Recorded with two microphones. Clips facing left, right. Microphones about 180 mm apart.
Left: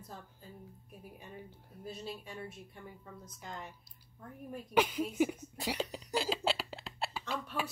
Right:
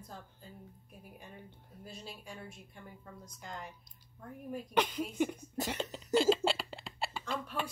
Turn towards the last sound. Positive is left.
turn(degrees=5)  # may be behind; listen again after turning